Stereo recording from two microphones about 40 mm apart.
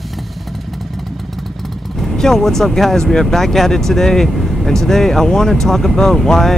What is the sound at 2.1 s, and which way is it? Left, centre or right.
Speech, centre.